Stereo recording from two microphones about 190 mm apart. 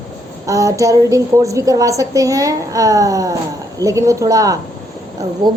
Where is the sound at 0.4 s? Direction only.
15° right (ahead or behind).